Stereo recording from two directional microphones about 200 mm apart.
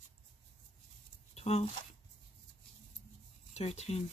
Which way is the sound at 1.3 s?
30° left (ahead or behind).